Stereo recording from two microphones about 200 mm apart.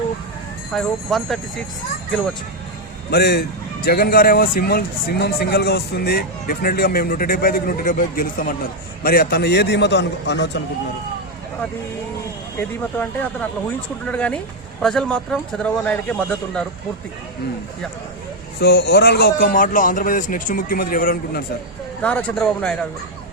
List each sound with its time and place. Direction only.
0.7 s a man's voice: centre (ahead or behind)
3.1 s a man's voice: 55° left (ahead or behind)
12.5 s a man's voice: 10° left (ahead or behind)
18.6 s a man's voice: 55° left (ahead or behind)
22.0 s a man's voice: 5° left (ahead or behind)